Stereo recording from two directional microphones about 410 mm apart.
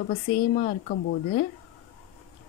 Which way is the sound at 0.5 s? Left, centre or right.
Centre.